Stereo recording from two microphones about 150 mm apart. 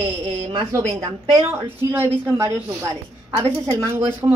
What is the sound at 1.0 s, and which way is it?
Speech, 40° right (ahead or behind).